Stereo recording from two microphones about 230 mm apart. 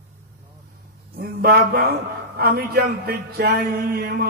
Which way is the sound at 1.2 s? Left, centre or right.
Right.